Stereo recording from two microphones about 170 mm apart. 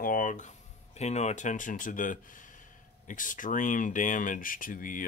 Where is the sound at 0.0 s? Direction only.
50° left (ahead or behind).